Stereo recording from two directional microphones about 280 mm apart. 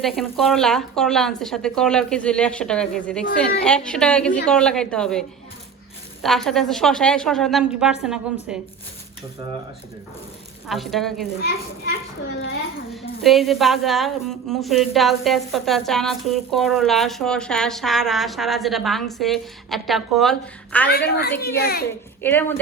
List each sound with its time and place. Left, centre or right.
0.0 s a woman's voice: centre
6.2 s a woman's voice: centre
10.7 s a woman's voice: centre
11.4 s a child's voice: left
13.2 s a woman's voice: centre
20.9 s a child's voice: left
22.2 s speech: centre